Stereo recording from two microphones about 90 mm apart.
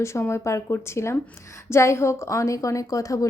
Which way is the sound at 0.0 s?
30° left (ahead or behind).